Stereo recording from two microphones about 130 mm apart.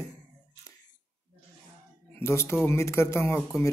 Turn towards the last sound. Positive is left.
turn(degrees=20)  # may be behind; listen again after turning